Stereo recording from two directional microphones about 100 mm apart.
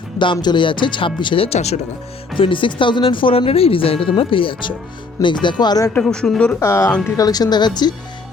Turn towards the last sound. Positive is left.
turn(degrees=45)  # may be behind; listen again after turning